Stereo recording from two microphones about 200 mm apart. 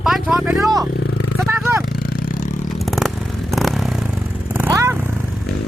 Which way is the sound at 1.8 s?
45° left (ahead or behind).